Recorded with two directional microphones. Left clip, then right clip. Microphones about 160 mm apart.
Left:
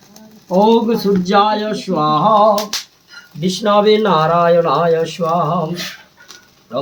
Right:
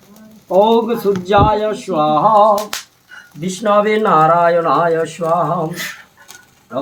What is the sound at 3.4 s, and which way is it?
Speech, 40° left (ahead or behind).